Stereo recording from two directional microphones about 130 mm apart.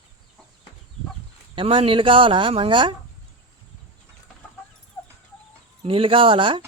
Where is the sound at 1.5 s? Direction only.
45° right (ahead or behind).